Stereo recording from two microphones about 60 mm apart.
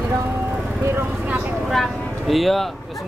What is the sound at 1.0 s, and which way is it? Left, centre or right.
Vehicle, right.